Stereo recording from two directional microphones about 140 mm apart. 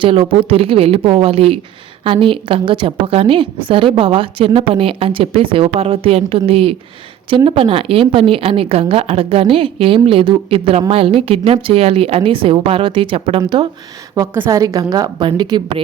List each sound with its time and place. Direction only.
0.0 s a woman's voice: 40° right (ahead or behind)
13.4 s a woman's voice: 30° right (ahead or behind)
14.3 s a woman's voice: 20° right (ahead or behind)